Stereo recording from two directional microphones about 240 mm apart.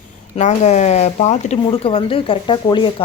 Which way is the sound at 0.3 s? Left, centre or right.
Left.